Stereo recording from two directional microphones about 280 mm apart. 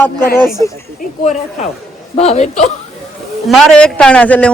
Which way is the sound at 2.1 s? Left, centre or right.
Left.